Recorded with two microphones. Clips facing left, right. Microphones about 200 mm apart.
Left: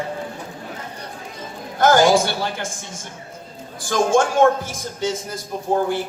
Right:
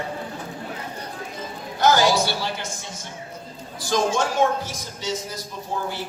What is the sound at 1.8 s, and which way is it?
Speech, 50° left (ahead or behind).